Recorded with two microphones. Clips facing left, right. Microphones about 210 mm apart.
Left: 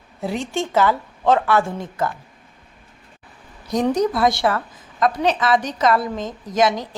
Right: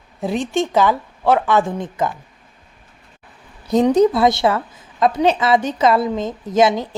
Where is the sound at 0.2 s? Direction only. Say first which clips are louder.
Right 4 dB; 15° right (ahead or behind).